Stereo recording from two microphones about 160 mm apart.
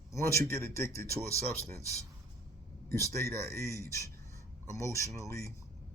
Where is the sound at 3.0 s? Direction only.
20° left (ahead or behind).